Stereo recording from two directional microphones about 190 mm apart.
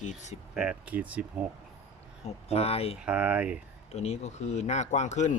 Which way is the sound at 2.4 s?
30° left (ahead or behind).